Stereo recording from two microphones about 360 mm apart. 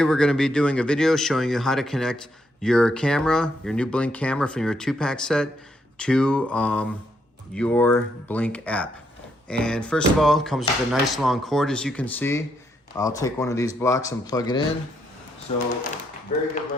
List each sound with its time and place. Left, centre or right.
0.0 s speech: centre